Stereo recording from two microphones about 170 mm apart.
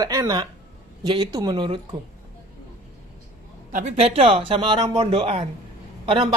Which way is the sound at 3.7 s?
45° right (ahead or behind).